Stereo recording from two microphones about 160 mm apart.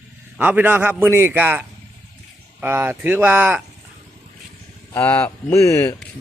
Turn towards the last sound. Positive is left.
turn(degrees=20)  # may be behind; listen again after turning